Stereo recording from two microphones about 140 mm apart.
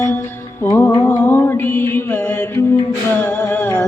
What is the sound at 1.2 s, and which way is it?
Mantra, 20° left (ahead or behind).